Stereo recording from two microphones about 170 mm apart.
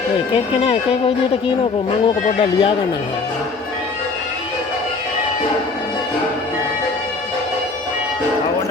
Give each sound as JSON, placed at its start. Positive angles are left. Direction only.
{"t": 0.3, "sound": "speech", "side_deg": 35}
{"t": 2.4, "sound": "speech", "side_deg": 30}